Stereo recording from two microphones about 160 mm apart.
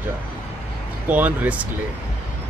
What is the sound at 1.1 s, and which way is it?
Speech, 10° right (ahead or behind).